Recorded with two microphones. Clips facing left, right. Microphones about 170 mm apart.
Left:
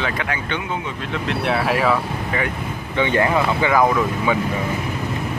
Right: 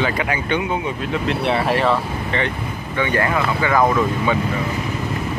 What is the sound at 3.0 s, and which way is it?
Speech, 20° left (ahead or behind).